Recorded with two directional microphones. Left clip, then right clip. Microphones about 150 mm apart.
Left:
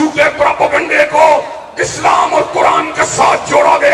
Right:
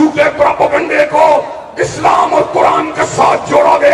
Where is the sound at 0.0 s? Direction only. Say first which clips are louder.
Right 1 dB; 15° right (ahead or behind).